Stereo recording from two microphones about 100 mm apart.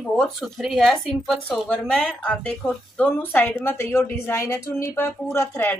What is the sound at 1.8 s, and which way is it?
Speech, 10° left (ahead or behind).